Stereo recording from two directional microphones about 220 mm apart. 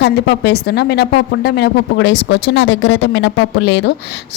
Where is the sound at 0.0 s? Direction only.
50° left (ahead or behind).